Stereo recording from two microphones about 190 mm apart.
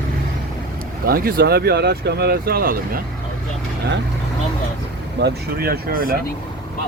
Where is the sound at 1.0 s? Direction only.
50° right (ahead or behind).